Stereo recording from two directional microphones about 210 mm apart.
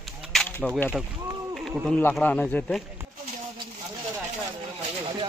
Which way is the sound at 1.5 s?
Centre (ahead or behind).